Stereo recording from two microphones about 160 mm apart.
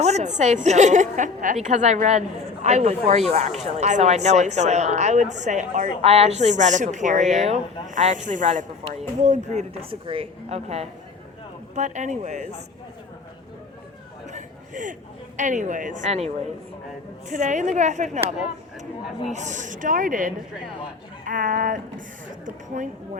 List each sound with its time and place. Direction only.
0.0 s a woman's voice: 45° right (ahead or behind)
6.0 s a woman's voice: 40° right (ahead or behind)
14.3 s chatter: 50° right (ahead or behind)
15.4 s a woman's voice: 50° right (ahead or behind)
19.3 s a woman's voice: 50° right (ahead or behind)